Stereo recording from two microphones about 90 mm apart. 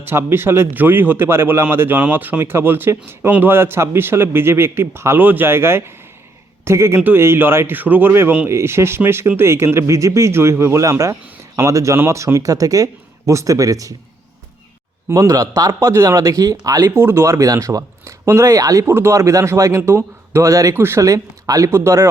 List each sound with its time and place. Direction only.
0.0 s a man's voice: 25° right (ahead or behind)
15.1 s speech: 40° right (ahead or behind)
17.0 s a man's voice: 25° right (ahead or behind)
17.3 s speech: 35° right (ahead or behind)